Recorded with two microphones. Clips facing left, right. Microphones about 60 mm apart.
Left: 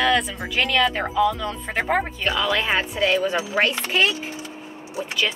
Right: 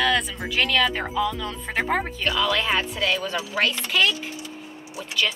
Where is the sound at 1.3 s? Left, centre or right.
Centre; by 4.2 s left.